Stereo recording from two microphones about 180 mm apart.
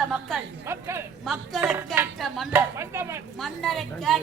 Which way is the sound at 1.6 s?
10° right (ahead or behind).